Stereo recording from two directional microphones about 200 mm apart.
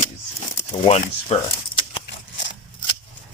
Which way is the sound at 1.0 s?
30° left (ahead or behind).